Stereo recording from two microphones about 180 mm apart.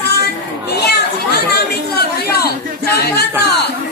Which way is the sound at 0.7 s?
65° left (ahead or behind).